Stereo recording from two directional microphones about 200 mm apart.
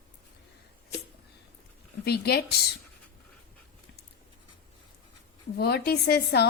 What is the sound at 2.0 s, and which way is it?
Speech, 50° left (ahead or behind).